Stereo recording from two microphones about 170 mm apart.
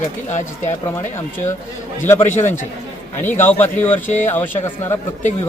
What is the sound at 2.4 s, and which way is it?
Speech, 45° left (ahead or behind).